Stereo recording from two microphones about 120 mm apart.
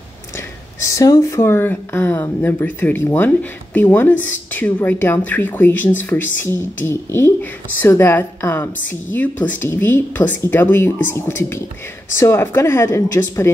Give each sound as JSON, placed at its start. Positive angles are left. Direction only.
{"t": 0.7, "sound": "a woman's voice", "side_deg": 25}